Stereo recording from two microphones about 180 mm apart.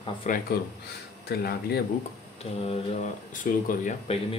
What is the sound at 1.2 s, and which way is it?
Speech, 60° left (ahead or behind).